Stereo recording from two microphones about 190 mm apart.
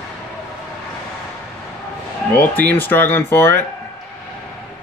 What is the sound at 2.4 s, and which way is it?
Speech, 10° left (ahead or behind).